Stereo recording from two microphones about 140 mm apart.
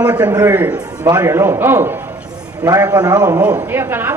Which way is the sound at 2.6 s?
25° right (ahead or behind).